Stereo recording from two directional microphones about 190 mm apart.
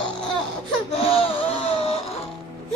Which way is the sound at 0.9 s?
30° left (ahead or behind).